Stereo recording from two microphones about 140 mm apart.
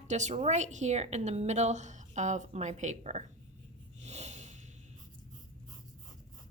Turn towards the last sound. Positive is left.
turn(degrees=-55)  # may be behind; listen again after turning